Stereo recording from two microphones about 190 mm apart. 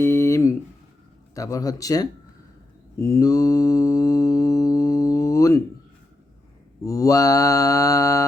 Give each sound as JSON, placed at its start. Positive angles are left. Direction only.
{"t": 0.0, "sound": "a sound", "side_deg": 15}
{"t": 1.4, "sound": "speech", "side_deg": 15}
{"t": 3.0, "sound": "mantra", "side_deg": 15}
{"t": 6.8, "sound": "mantra", "side_deg": 15}